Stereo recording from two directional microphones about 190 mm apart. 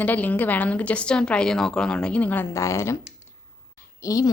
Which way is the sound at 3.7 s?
15° left (ahead or behind).